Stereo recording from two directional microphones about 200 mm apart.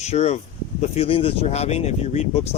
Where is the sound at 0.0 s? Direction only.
35° left (ahead or behind).